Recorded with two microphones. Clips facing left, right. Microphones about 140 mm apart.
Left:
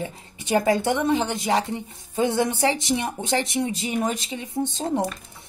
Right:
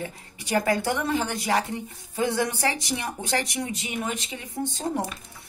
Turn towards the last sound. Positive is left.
turn(degrees=20)  # may be behind; listen again after turning